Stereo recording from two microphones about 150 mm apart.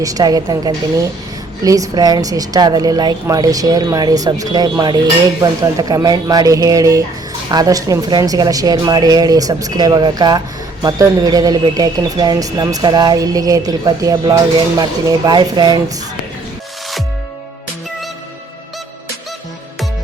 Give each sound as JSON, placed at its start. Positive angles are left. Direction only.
{"t": 0.0, "sound": "a woman's voice", "side_deg": -25}